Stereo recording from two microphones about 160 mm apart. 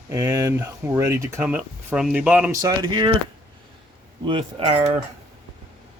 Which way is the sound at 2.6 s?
25° right (ahead or behind).